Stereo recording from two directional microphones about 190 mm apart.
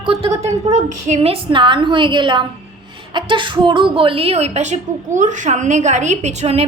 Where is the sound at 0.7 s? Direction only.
35° right (ahead or behind).